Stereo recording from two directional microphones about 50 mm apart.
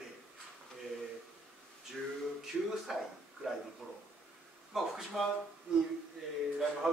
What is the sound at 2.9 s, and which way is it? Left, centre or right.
Speech, centre.